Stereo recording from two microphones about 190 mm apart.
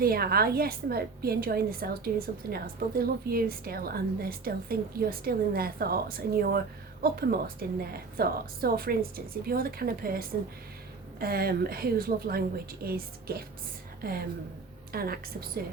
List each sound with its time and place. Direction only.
0.0 s a woman's voice: 55° right (ahead or behind)